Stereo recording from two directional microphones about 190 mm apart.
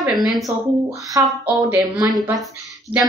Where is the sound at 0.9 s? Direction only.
15° right (ahead or behind).